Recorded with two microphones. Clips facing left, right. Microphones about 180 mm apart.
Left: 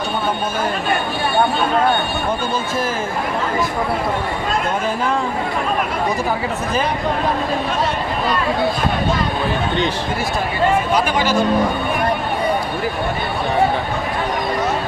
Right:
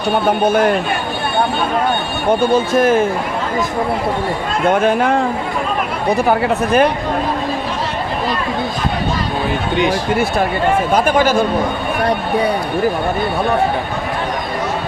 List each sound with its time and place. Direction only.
0.3 s speech: 65° right (ahead or behind)
2.5 s speech: 65° right (ahead or behind)
4.7 s speech: 65° right (ahead or behind)
6.2 s speech: 65° right (ahead or behind)
10.9 s speech: 50° right (ahead or behind)